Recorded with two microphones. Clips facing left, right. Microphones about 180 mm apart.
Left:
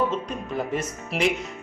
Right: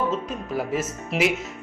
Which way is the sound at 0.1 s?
Centre (ahead or behind).